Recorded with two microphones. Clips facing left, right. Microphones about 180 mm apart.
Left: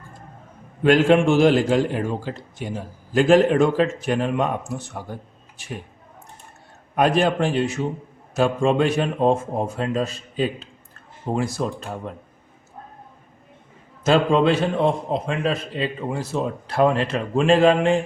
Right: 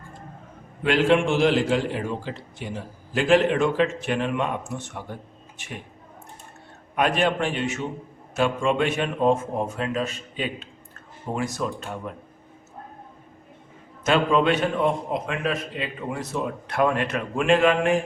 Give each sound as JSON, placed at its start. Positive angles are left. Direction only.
{"t": 0.9, "sound": "a man's voice", "side_deg": 45}
{"t": 6.9, "sound": "a man's voice", "side_deg": 35}
{"t": 14.0, "sound": "a man's voice", "side_deg": 30}